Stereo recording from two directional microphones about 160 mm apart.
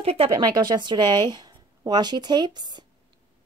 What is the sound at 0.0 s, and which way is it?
Speech, 35° right (ahead or behind).